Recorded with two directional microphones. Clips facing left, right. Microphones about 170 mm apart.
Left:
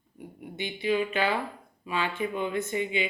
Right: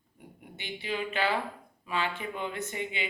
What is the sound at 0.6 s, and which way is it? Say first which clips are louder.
Speech: left 7 dB; 15° left (ahead or behind).